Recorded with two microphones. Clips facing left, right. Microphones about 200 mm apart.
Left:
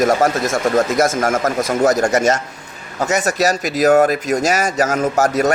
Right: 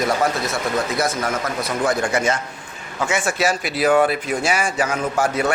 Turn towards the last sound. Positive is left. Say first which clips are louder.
# left 5 dB
turn(degrees=40)  # may be behind; listen again after turning